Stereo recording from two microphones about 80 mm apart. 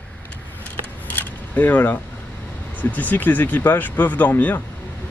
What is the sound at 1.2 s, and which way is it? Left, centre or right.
Single-lens reflex camera, left.